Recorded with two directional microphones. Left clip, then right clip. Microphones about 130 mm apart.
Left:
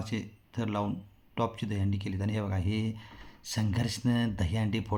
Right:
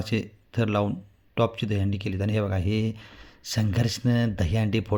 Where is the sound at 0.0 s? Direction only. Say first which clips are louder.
Right 8 dB; 40° right (ahead or behind).